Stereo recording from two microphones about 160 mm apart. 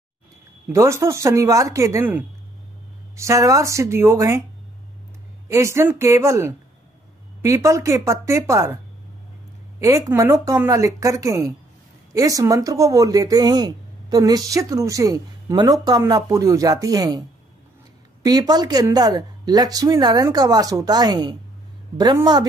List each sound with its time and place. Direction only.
0.7 s speech: 15° right (ahead or behind)
5.5 s speech: 15° right (ahead or behind)
9.8 s speech: 20° right (ahead or behind)
18.2 s speech: 25° right (ahead or behind)